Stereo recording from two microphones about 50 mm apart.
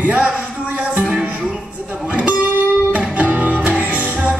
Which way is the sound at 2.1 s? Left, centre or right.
Right.